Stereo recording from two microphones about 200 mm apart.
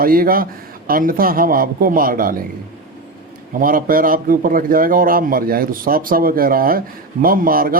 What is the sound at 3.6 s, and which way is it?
A man's voice, 45° right (ahead or behind).